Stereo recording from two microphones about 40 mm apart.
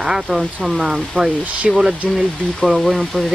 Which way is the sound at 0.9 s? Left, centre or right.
Centre.